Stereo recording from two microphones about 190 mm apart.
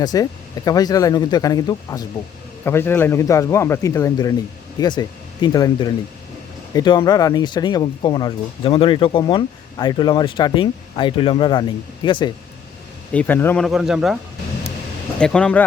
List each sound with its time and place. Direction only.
0.0 s speech: 20° left (ahead or behind)
13.1 s speech: 10° left (ahead or behind)
13.7 s speech: centre (ahead or behind)
15.2 s speech: 5° left (ahead or behind)